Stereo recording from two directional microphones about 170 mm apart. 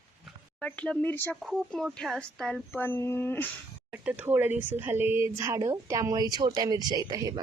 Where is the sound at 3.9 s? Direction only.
10° right (ahead or behind).